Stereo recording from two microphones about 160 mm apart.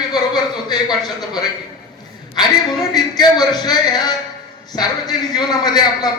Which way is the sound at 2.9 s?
25° left (ahead or behind).